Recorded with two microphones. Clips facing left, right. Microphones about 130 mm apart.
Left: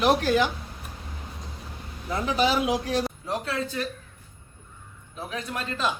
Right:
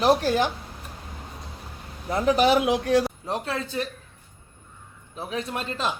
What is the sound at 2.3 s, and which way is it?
Speech, 60° right (ahead or behind).